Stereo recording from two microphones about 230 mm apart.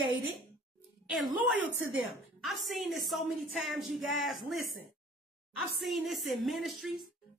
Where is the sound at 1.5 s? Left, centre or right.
Right.